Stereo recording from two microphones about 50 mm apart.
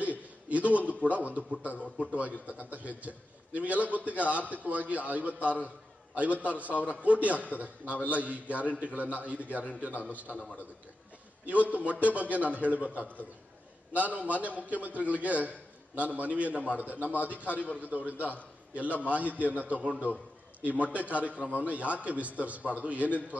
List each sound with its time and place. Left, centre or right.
0.0 s chuckle: right
1.6 s a man's voice: right
11.7 s a man's voice: right
13.0 s a man's voice: left
13.9 s a man's voice: right
17.5 s a man's voice: left
17.7 s a man's voice: right
20.6 s a man's voice: right